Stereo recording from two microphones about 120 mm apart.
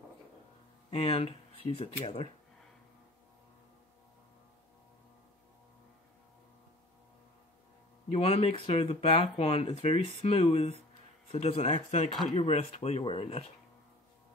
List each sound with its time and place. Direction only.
0.8 s speech: 55° left (ahead or behind)
8.1 s speech: 55° left (ahead or behind)
11.3 s speech: 60° left (ahead or behind)